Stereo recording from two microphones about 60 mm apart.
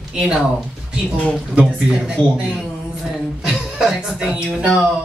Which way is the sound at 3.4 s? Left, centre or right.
Centre.